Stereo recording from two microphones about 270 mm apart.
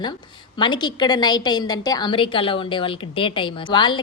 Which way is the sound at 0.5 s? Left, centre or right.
Centre.